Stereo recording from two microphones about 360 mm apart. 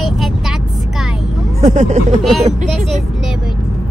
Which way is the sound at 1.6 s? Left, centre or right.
Centre.